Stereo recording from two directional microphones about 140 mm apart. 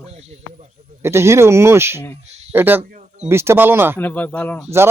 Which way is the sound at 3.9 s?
10° left (ahead or behind).